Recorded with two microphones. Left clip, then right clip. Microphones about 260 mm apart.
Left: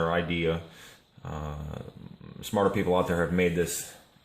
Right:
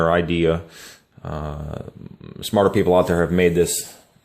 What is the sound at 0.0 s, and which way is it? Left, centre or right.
Speech, right.